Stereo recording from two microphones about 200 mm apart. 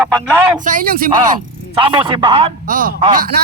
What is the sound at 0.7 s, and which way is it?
Speech, 45° right (ahead or behind).